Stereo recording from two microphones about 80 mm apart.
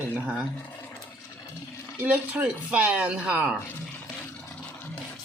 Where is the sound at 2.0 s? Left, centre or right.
Centre.